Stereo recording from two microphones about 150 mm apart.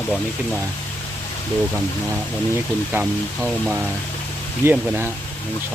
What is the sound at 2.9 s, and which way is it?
Speech, 10° right (ahead or behind).